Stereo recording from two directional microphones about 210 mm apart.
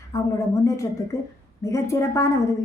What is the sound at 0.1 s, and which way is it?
A woman's voice, 15° left (ahead or behind).